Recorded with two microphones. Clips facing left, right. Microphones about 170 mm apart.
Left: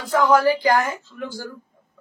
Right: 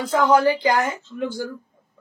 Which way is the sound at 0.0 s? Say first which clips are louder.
Even; 20° right (ahead or behind).